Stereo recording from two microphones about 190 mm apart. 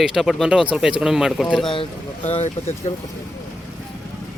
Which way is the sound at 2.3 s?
35° left (ahead or behind).